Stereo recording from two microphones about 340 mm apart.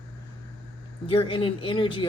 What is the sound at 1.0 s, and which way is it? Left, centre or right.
Speech, centre.